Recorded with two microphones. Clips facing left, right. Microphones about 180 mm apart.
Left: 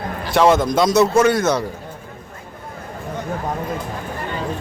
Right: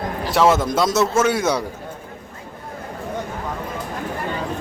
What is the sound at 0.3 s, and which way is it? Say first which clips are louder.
A man's voice: left 2 dB; 5° right (ahead or behind).